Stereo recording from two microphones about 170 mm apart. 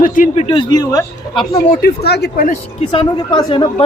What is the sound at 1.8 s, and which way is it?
Speech, 70° left (ahead or behind).